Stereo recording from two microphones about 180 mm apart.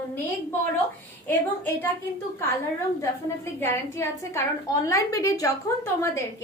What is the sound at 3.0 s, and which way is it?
A woman's voice, 15° left (ahead or behind).